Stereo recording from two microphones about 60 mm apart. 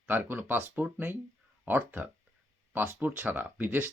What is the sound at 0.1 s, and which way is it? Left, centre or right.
Speech, right.